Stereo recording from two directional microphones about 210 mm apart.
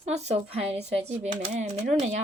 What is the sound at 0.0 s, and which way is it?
Speech, 30° right (ahead or behind).